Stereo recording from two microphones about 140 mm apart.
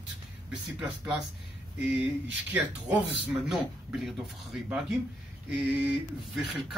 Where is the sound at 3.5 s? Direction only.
Centre (ahead or behind).